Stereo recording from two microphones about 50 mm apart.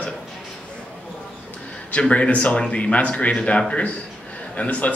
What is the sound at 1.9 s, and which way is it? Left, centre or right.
A man's voice, left.